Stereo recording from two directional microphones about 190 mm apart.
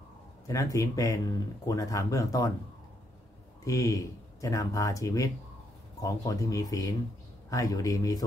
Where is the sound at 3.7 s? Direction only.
15° left (ahead or behind).